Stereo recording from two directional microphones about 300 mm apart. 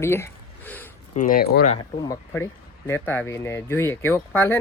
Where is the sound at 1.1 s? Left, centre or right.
Left.